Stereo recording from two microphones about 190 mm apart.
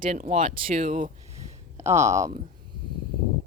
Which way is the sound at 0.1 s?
35° right (ahead or behind).